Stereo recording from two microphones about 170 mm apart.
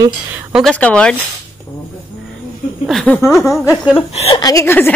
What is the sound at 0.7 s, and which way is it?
Speech, 5° left (ahead or behind).